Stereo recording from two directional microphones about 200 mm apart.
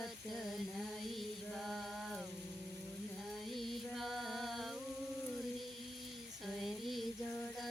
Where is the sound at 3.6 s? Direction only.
Centre (ahead or behind).